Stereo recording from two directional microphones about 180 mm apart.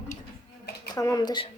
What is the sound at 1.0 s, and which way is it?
Speech, 20° left (ahead or behind).